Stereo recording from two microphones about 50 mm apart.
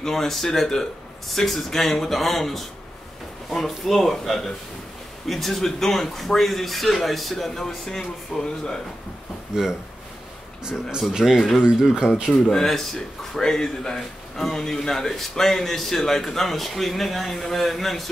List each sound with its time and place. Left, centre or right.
0.0 s a man's voice: centre
9.5 s speech: centre
12.4 s a man's voice: centre